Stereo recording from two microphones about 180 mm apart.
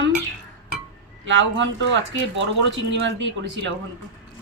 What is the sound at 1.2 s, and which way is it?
Speech, 90° right.